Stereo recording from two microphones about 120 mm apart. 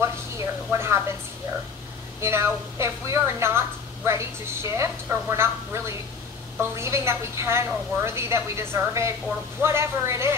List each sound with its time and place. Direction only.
0.7 s a woman's voice: 20° right (ahead or behind)
2.1 s a woman's voice: 20° right (ahead or behind)